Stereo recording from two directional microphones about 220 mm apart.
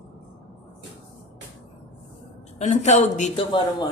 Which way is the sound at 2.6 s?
30° left (ahead or behind).